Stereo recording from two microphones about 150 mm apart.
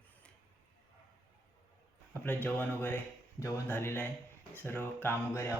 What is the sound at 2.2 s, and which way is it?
Speech, 10° left (ahead or behind).